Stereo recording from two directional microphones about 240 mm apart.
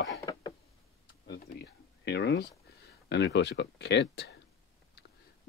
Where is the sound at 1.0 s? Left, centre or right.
Left.